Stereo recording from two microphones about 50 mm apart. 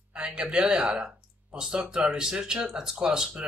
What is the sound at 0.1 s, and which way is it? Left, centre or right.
Speech, centre.